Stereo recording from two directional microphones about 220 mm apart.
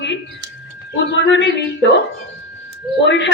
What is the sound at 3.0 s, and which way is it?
Speech, 50° left (ahead or behind).